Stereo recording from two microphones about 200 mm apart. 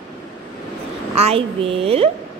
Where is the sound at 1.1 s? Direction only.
30° right (ahead or behind).